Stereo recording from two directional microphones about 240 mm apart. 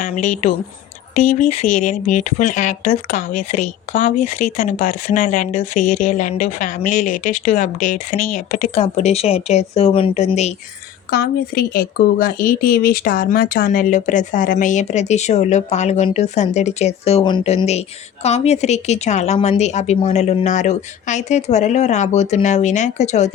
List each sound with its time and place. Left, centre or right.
0.0 s a woman's voice: left
11.1 s speech: left